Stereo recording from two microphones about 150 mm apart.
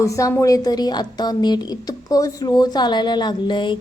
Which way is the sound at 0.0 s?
20° left (ahead or behind).